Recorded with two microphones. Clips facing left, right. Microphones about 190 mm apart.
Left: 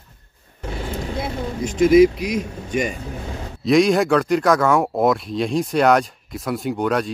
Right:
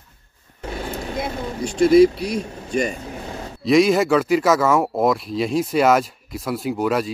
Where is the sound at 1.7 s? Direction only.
35° right (ahead or behind).